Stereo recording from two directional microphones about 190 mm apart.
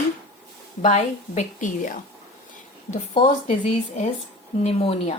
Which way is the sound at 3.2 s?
35° left (ahead or behind).